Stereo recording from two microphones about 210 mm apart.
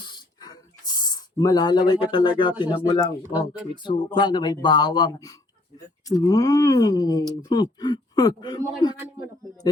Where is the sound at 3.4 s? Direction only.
20° left (ahead or behind).